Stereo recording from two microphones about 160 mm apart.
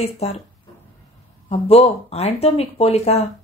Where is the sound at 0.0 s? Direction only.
40° left (ahead or behind).